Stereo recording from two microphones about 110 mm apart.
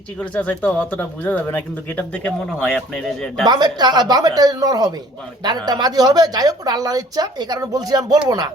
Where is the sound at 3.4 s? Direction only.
40° right (ahead or behind).